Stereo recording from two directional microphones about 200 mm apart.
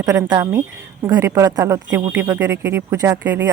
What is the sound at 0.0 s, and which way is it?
Speech, 15° right (ahead or behind).